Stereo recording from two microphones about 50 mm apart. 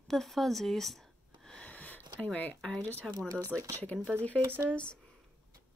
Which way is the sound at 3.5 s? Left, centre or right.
Centre.